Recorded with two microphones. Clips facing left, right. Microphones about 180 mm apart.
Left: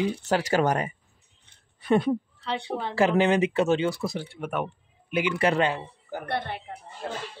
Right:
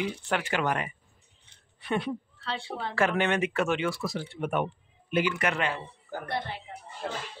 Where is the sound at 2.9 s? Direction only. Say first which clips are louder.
Left 5 dB; 30° left (ahead or behind).